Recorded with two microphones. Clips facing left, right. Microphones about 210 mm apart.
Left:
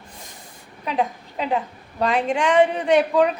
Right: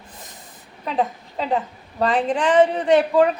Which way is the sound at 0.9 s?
Centre (ahead or behind).